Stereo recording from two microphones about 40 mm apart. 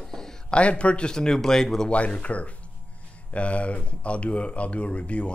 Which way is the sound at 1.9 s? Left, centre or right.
Left.